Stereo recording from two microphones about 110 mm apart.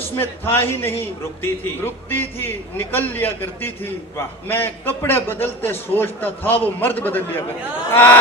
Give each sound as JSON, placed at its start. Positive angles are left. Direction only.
{"t": 0.2, "sound": "a man's voice", "side_deg": 20}